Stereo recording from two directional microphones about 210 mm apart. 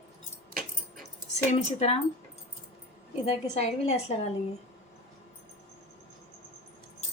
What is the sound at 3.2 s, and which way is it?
Speech, 30° left (ahead or behind).